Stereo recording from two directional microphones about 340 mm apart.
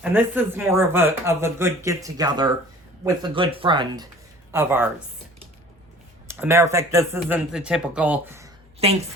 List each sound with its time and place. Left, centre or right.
0.0 s speech: centre
6.2 s speech: centre
8.8 s speech: centre